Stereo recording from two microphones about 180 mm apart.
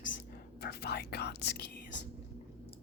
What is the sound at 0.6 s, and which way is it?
Whispering, 60° left (ahead or behind).